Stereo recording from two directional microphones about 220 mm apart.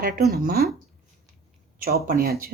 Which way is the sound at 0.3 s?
45° right (ahead or behind).